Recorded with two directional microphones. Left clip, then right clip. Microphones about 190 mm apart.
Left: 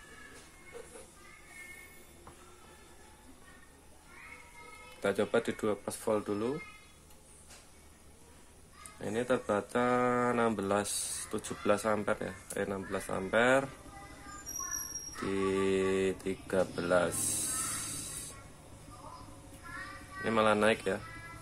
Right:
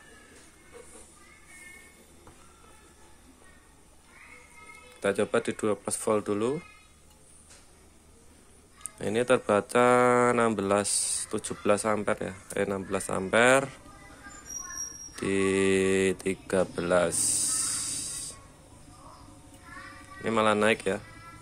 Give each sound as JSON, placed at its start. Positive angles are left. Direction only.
{"t": 5.0, "sound": "speech", "side_deg": -25}
{"t": 8.9, "sound": "speech", "side_deg": -40}
{"t": 15.2, "sound": "speech", "side_deg": -35}
{"t": 20.2, "sound": "speech", "side_deg": -25}